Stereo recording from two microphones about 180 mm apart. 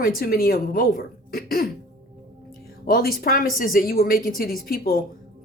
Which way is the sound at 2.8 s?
55° left (ahead or behind).